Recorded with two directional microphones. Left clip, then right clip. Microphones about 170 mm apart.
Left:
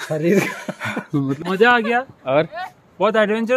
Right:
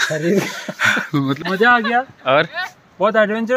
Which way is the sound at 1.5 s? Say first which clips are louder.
Right 1 dB; 35° left (ahead or behind).